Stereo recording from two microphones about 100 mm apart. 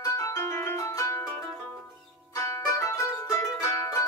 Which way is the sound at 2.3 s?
30° left (ahead or behind).